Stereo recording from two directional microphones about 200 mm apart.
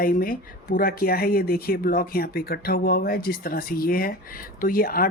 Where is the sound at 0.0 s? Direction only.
45° left (ahead or behind).